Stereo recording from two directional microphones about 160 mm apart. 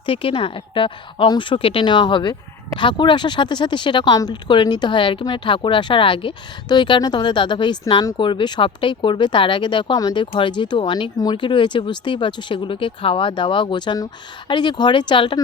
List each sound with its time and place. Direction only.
0.0 s a woman's voice: 35° left (ahead or behind)